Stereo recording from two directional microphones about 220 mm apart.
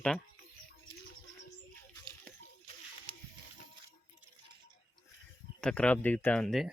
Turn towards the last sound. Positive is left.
turn(degrees=0)  # may be behind; listen again after turning